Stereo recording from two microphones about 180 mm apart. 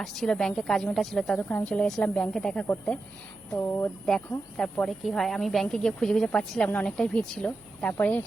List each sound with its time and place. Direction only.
0.0 s speech: centre (ahead or behind)